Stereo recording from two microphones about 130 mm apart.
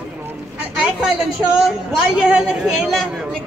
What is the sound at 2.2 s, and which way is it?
Speech, 5° right (ahead or behind).